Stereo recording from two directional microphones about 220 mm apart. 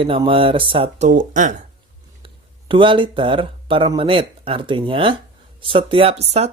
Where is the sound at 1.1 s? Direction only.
35° right (ahead or behind).